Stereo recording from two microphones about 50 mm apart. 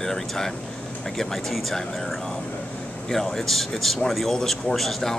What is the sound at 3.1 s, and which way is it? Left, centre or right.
Speech, centre.